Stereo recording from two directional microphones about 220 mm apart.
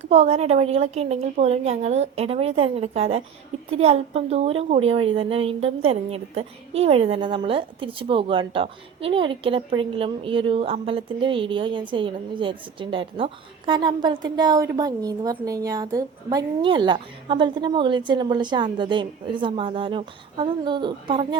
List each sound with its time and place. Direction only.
0.0 s a woman's voice: 30° right (ahead or behind)